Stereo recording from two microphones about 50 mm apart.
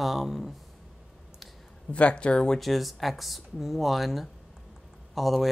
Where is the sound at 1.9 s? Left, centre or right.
Left.